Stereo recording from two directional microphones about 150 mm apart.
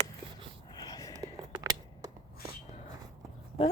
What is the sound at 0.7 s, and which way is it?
Whispering, 25° left (ahead or behind).